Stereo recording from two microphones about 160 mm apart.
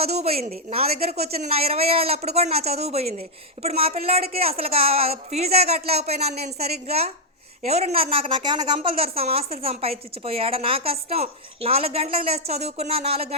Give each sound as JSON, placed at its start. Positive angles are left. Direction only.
{"t": 0.0, "sound": "a woman's voice", "side_deg": -40}